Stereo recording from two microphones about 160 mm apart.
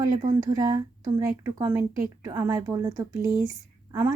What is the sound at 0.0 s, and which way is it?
Speech, 20° right (ahead or behind).